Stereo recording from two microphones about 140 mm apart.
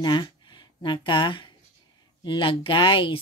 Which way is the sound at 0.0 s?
30° left (ahead or behind).